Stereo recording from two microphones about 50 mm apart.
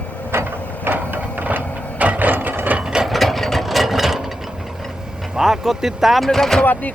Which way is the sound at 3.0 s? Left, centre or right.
Centre.